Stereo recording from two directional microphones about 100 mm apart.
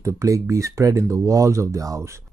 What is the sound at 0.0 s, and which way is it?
Speech, 30° right (ahead or behind).